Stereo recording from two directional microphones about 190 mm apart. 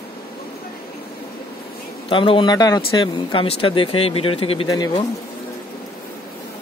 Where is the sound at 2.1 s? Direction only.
25° left (ahead or behind).